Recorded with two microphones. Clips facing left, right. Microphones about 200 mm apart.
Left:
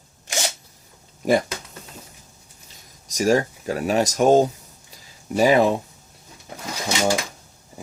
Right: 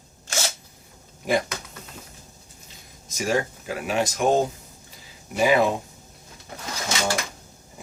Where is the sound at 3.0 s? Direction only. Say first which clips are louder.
Left 5 dB; 40° left (ahead or behind).